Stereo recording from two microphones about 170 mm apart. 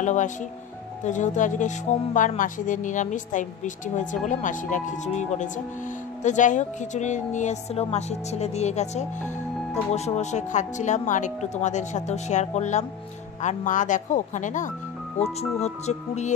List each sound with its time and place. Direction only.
0.0 s a woman's voice: 45° left (ahead or behind)
15.1 s speech: centre (ahead or behind)
15.6 s speech: 40° left (ahead or behind)